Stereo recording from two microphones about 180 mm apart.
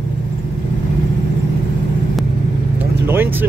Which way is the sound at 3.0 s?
10° right (ahead or behind).